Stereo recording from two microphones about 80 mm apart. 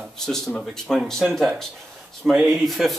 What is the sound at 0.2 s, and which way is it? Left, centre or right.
Speech, centre.